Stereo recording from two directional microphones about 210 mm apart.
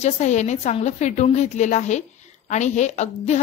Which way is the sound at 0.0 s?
35° left (ahead or behind).